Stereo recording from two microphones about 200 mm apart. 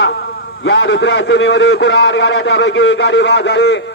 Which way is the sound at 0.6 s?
65° left (ahead or behind).